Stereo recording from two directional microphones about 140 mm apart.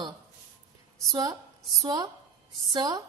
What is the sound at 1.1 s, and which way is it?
A woman's voice, 25° right (ahead or behind).